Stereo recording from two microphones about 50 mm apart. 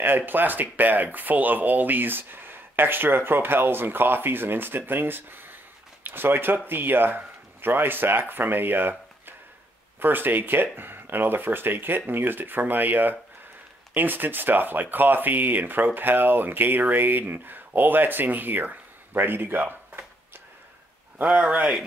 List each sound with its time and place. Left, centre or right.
0.0 s speech: right
21.2 s speech: right